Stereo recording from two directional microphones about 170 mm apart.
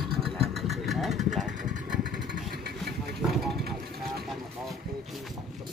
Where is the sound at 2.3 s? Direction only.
65° right (ahead or behind).